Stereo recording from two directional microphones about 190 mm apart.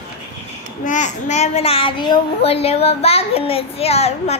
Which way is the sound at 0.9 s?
40° left (ahead or behind).